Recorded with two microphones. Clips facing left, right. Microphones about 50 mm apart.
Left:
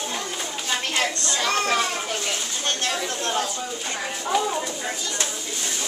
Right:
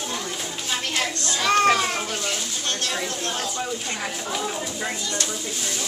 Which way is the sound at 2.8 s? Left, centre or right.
Centre.